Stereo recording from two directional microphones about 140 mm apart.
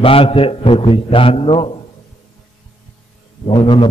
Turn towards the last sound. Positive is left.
turn(degrees=35)  # may be behind; listen again after turning